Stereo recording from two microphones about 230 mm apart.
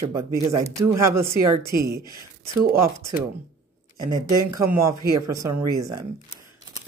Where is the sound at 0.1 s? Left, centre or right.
Centre.